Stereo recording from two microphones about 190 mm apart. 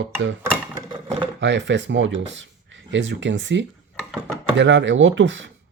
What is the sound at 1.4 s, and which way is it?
Speech, 70° right (ahead or behind).